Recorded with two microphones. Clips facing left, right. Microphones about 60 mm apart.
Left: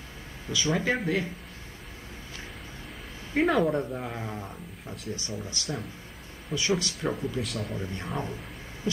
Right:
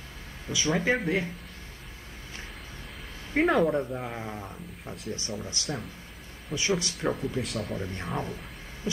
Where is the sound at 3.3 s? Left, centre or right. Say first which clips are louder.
Right 1 dB; centre.